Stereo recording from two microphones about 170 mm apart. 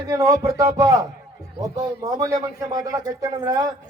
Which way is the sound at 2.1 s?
20° right (ahead or behind).